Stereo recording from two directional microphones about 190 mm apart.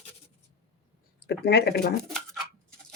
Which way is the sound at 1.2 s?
60° left (ahead or behind).